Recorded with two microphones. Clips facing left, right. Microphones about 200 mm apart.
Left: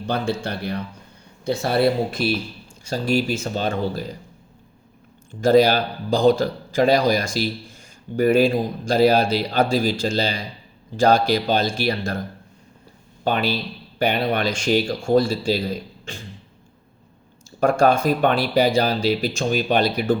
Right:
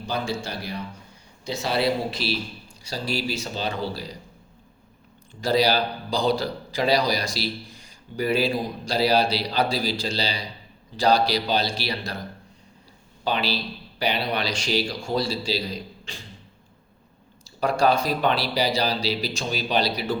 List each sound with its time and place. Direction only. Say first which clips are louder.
0.0 s a man's voice: left 4 dB; 60° left (ahead or behind)
5.4 s a man's voice: left 6 dB; 50° left (ahead or behind)
13.2 s a man's voice: left 4 dB; 50° left (ahead or behind)
17.6 s a man's voice: left 4 dB; 50° left (ahead or behind)